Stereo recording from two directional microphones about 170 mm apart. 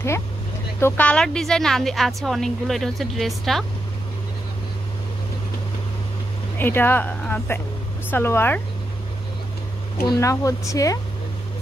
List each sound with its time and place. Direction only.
0.7 s a woman's voice: 10° left (ahead or behind)
6.6 s speech: 10° left (ahead or behind)
10.0 s speech: 20° left (ahead or behind)